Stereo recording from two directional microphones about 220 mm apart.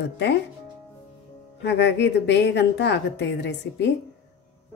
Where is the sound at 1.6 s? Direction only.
50° left (ahead or behind).